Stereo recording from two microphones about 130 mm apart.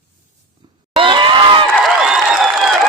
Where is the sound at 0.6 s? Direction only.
35° right (ahead or behind).